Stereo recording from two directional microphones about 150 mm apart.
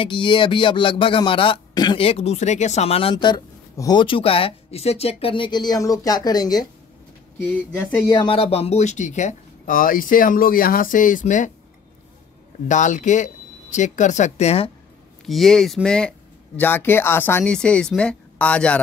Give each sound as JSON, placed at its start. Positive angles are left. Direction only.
{"t": 0.0, "sound": "speech", "side_deg": 35}
{"t": 8.1, "sound": "speech", "side_deg": 30}
{"t": 12.6, "sound": "speech", "side_deg": 55}
{"t": 15.2, "sound": "speech", "side_deg": 0}